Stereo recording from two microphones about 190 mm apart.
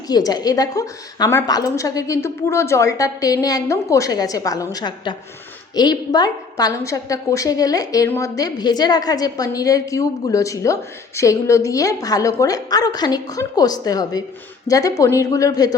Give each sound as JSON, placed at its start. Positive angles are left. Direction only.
{"t": 0.1, "sound": "a woman's voice", "side_deg": 20}